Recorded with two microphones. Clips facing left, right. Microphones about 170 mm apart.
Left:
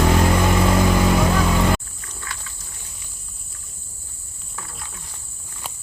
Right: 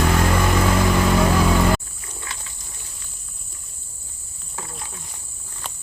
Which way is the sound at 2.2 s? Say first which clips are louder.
Left 1 dB; 20° right (ahead or behind).